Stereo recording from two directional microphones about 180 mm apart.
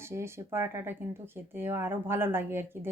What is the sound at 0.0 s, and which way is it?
A woman's voice, 15° right (ahead or behind).